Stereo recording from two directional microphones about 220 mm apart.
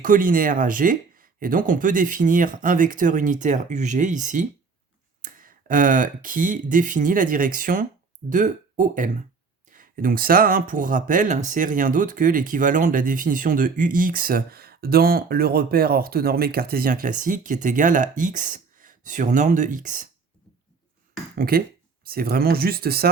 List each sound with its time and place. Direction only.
0.0 s speech: 40° right (ahead or behind)
21.3 s speech: 40° right (ahead or behind)